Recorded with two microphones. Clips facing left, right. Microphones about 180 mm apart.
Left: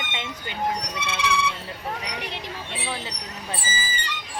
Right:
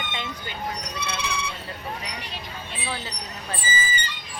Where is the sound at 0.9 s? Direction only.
90° left.